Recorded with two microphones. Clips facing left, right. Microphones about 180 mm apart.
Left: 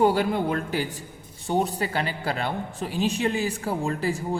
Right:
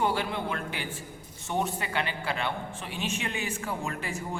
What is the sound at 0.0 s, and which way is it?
A man's voice, 40° left (ahead or behind).